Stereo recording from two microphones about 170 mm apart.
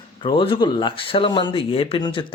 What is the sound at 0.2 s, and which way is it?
Speech, 30° left (ahead or behind).